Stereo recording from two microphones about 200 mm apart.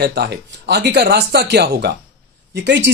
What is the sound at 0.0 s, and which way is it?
Speech, 50° right (ahead or behind).